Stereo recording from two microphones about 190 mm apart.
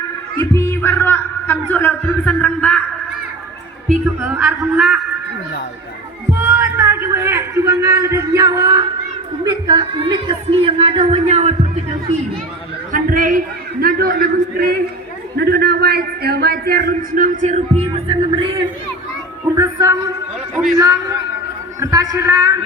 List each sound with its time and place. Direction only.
0.3 s speech: 15° left (ahead or behind)
4.0 s a woman's voice: 5° right (ahead or behind)
6.4 s a man's voice: 15° right (ahead or behind); by 11.5 s 35° right (ahead or behind)
12.9 s a man's voice: 45° right (ahead or behind); by 22.5 s 20° right (ahead or behind)